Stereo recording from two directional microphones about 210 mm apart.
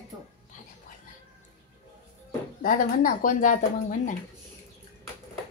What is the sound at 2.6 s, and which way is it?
Speech, 40° left (ahead or behind).